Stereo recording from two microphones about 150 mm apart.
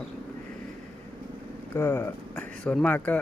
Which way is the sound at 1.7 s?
15° left (ahead or behind).